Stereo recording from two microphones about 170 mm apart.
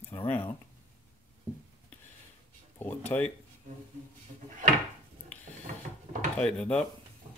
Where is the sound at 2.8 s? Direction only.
10° left (ahead or behind).